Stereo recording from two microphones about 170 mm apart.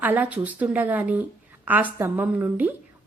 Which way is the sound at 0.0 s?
10° right (ahead or behind).